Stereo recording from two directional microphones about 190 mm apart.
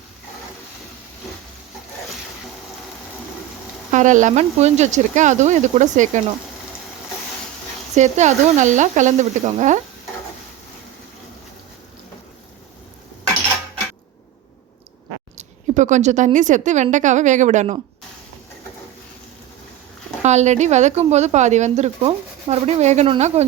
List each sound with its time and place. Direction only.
3.9 s a woman's voice: 40° right (ahead or behind)
7.9 s a woman's voice: 40° right (ahead or behind)
15.4 s a woman's voice: 40° right (ahead or behind)
20.2 s a woman's voice: 35° right (ahead or behind)